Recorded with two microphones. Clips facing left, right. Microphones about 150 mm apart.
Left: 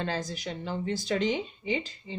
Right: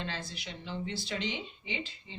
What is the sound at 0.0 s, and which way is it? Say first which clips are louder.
Speech: left 7 dB; 45° left (ahead or behind).